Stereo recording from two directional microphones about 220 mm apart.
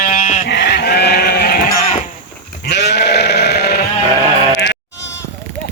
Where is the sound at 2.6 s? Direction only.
50° left (ahead or behind).